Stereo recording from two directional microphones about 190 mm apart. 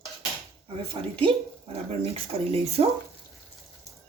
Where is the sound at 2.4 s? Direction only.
30° right (ahead or behind).